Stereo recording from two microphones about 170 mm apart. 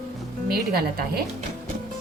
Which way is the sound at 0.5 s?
65° right (ahead or behind).